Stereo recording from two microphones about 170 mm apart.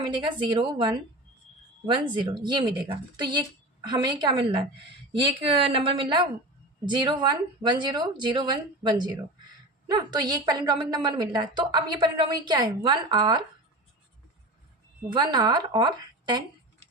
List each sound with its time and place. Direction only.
0.0 s a woman's voice: 25° right (ahead or behind)
1.9 s a woman's voice: 30° right (ahead or behind)
15.1 s a woman's voice: 25° right (ahead or behind)